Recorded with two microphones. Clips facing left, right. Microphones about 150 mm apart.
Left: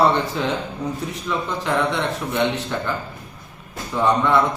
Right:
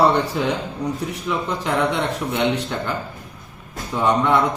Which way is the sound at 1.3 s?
15° right (ahead or behind).